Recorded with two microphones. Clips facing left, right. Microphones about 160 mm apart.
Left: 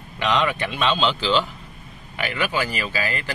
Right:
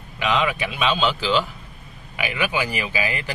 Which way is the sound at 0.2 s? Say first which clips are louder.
Even; 5° right (ahead or behind).